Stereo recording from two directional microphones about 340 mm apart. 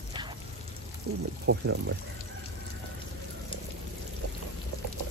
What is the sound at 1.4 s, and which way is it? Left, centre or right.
Speech, right.